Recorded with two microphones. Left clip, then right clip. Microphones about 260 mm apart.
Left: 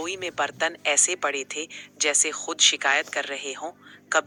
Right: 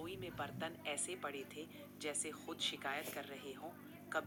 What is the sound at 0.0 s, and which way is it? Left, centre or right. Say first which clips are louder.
Speech: left 19 dB; left.